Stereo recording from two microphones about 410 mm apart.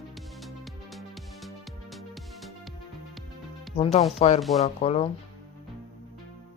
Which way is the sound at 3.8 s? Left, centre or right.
Centre.